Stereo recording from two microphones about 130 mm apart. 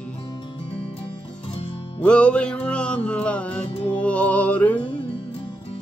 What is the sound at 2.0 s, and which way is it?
Music, 10° left (ahead or behind).